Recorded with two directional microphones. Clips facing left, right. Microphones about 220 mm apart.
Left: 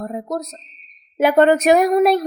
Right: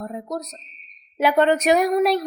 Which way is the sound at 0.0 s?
50° left (ahead or behind).